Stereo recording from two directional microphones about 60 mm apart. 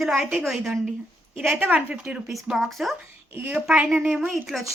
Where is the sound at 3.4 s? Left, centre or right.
Right.